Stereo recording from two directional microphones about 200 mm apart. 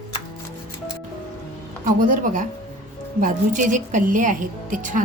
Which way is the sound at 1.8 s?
45° right (ahead or behind).